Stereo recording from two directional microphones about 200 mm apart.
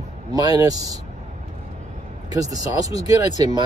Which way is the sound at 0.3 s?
20° right (ahead or behind).